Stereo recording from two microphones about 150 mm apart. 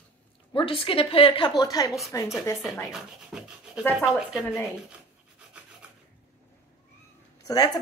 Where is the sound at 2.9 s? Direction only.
5° right (ahead or behind).